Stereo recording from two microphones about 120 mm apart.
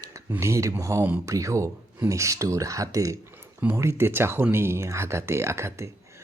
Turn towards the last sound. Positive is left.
turn(degrees=-20)  # may be behind; listen again after turning